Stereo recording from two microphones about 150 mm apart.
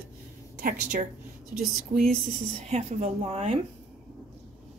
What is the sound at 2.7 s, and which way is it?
Speech, 45° right (ahead or behind).